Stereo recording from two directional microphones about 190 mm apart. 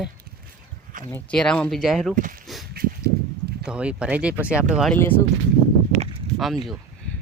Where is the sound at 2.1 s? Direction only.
45° right (ahead or behind).